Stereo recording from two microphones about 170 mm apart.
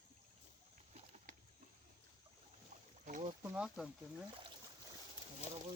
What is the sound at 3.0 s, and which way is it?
Boat, 45° right (ahead or behind).